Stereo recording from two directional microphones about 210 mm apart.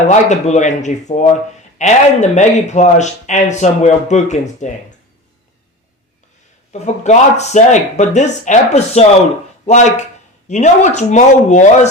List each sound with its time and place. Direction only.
0.1 s speech: 35° left (ahead or behind)
6.7 s speech: 30° left (ahead or behind)